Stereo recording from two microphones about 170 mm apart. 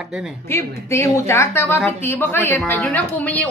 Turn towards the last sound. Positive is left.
turn(degrees=10)  # may be behind; listen again after turning